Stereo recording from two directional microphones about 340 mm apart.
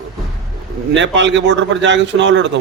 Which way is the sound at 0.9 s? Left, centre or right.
Right.